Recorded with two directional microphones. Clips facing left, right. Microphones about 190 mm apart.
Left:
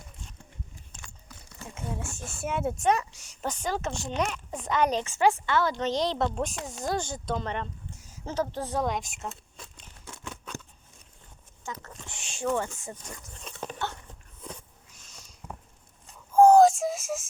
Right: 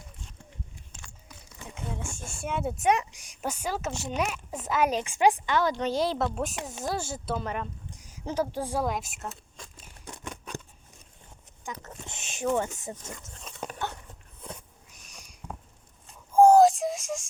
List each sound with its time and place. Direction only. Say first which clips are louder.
1.6 s speech: left 1 dB; 5° left (ahead or behind)
2.9 s speech: right 1 dB; 15° right (ahead or behind)
10.1 s scissors: right 1 dB; 15° right (ahead or behind)
11.6 s speech: even; 15° right (ahead or behind)
13.4 s a sound: even; 10° right (ahead or behind)
14.9 s a sound: right 2 dB; 15° right (ahead or behind)
16.3 s synthetic singing: even; 10° right (ahead or behind)